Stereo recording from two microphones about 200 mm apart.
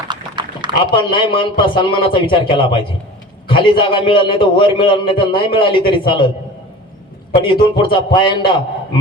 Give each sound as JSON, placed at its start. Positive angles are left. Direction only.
{"t": 0.1, "sound": "a sound", "side_deg": -20}
{"t": 0.9, "sound": "a man's voice", "side_deg": 25}
{"t": 7.3, "sound": "a man's voice", "side_deg": 25}